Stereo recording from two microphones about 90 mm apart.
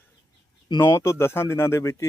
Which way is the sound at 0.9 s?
30° left (ahead or behind).